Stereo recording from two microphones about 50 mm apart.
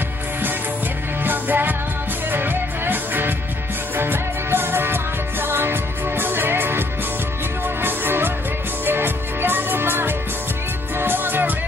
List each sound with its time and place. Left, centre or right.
1.2 s music: right
7.8 s music: right